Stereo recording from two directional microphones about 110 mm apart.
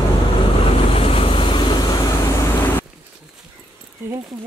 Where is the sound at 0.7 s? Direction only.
60° left (ahead or behind); by 2.5 s 35° left (ahead or behind).